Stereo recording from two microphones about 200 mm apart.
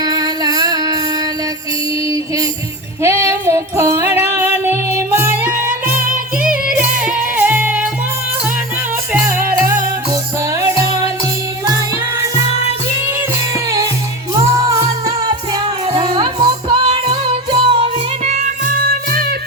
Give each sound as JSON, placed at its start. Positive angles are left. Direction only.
{"t": 0.0, "sound": "a sound", "side_deg": -20}
{"t": 3.0, "sound": "music", "side_deg": -15}
{"t": 6.1, "sound": "music", "side_deg": -45}
{"t": 7.0, "sound": "music", "side_deg": -5}
{"t": 9.2, "sound": "music", "side_deg": -10}
{"t": 14.7, "sound": "music", "side_deg": -20}
{"t": 18.3, "sound": "music", "side_deg": -40}